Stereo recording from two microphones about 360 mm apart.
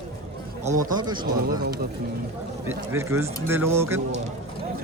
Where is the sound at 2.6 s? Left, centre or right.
Centre.